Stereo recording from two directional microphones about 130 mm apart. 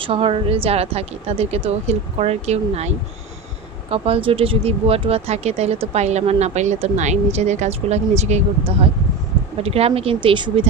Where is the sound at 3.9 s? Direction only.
45° right (ahead or behind).